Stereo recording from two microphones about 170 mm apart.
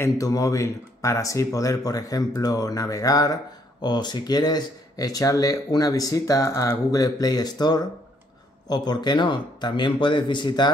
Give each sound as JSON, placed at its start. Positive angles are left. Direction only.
{"t": 0.0, "sound": "speech", "side_deg": 20}